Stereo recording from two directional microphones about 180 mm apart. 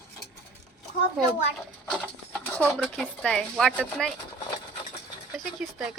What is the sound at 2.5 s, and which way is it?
Speech, 5° left (ahead or behind).